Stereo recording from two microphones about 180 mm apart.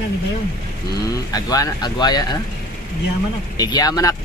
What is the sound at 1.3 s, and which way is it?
Speech, 20° left (ahead or behind).